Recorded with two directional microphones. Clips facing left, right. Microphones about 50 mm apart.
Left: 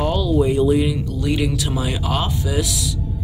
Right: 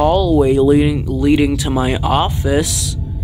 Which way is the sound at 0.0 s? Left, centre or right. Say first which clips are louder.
Right 6 dB; right.